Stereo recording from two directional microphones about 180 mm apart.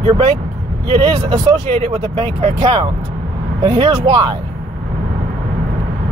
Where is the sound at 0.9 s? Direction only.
30° right (ahead or behind).